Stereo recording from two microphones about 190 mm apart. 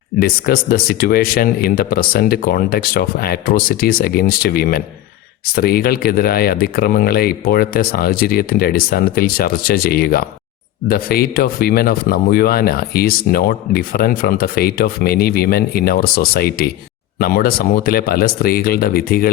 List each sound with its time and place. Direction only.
0.2 s speech: 50° left (ahead or behind)